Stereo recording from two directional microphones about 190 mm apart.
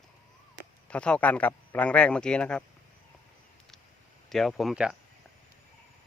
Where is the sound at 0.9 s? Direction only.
5° left (ahead or behind).